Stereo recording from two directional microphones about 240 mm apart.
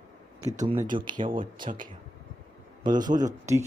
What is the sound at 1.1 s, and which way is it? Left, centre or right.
Speech, centre.